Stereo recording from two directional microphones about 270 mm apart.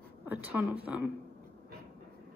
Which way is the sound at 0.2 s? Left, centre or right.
Centre.